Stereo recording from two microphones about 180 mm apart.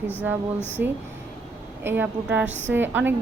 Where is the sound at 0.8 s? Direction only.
65° right (ahead or behind).